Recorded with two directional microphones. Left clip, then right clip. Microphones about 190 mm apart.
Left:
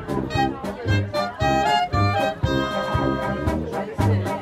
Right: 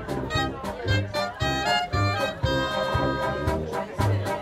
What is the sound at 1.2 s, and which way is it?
Music, 30° left (ahead or behind).